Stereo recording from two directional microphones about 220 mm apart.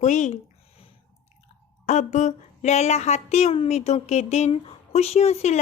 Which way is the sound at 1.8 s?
30° left (ahead or behind).